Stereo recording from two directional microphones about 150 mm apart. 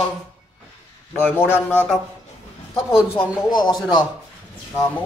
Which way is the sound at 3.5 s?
30° left (ahead or behind).